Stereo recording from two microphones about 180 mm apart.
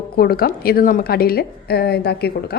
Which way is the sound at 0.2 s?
60° left (ahead or behind).